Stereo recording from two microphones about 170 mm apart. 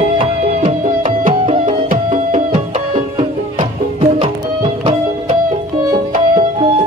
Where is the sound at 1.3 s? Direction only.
35° right (ahead or behind).